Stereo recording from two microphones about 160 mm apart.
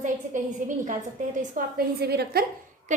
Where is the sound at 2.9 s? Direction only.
50° right (ahead or behind).